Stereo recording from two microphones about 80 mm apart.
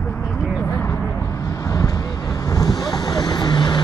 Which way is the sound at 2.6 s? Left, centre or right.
Left.